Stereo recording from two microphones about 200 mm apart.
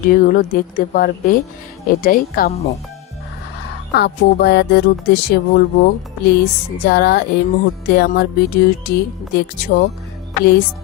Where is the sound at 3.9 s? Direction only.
55° left (ahead or behind).